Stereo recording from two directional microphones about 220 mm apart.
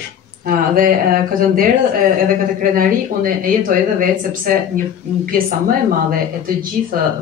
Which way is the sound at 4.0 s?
40° right (ahead or behind).